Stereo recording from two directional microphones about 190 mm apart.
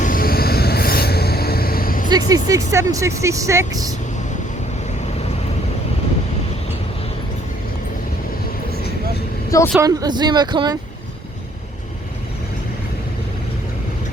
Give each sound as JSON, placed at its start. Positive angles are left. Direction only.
{"t": 0.0, "sound": "a sound", "side_deg": 50}
{"t": 2.0, "sound": "speech", "side_deg": -20}
{"t": 9.8, "sound": "speech", "side_deg": -20}